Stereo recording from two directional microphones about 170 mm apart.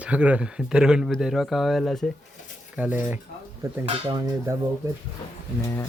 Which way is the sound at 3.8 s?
35° right (ahead or behind).